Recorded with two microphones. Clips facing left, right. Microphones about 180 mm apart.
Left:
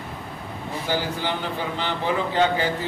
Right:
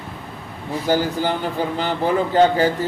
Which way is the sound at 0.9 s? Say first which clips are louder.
Right 7 dB; 45° right (ahead or behind).